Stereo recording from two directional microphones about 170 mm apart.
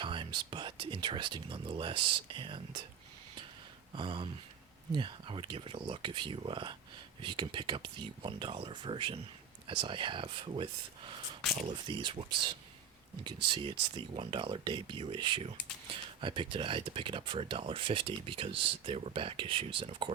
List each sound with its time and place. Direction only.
0.0 s speech: 30° right (ahead or behind)
3.9 s speech: 30° right (ahead or behind)